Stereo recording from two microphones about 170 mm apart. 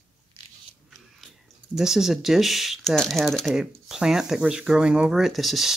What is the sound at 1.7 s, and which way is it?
Speech, 5° right (ahead or behind).